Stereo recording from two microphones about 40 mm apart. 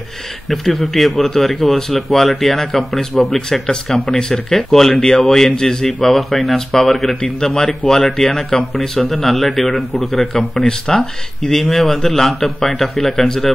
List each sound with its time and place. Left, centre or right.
0.5 s speech: centre
3.6 s a man's voice: left
7.2 s a man's voice: centre
10.6 s a man's voice: centre
11.7 s a man's voice: centre